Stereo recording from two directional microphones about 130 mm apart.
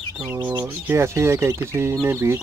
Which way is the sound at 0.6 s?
20° right (ahead or behind).